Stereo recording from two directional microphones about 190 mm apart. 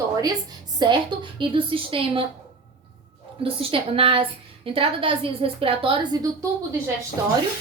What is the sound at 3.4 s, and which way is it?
A woman's voice, 30° right (ahead or behind).